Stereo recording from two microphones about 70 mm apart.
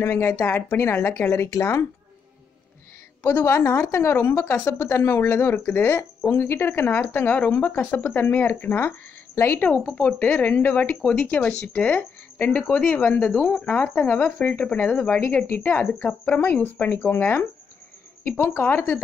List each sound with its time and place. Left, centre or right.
0.0 s a woman's voice: left
3.2 s a woman's voice: left
3.4 s a woman's voice: left
9.7 s speech: left
15.9 s speech: centre
18.6 s speech: left